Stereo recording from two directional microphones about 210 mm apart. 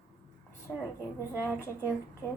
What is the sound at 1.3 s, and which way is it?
Speech, 10° right (ahead or behind).